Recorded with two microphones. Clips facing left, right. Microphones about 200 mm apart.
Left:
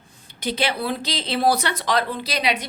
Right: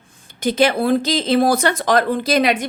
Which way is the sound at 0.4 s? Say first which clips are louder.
Right 8 dB; 45° right (ahead or behind).